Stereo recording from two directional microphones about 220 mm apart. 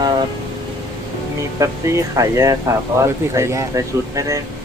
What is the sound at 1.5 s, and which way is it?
Speech, 15° right (ahead or behind).